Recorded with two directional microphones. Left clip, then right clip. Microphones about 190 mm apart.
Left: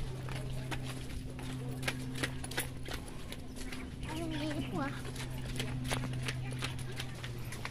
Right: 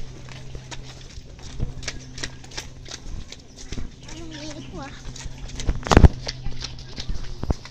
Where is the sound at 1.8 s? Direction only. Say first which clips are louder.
Right 4 dB; 30° left (ahead or behind).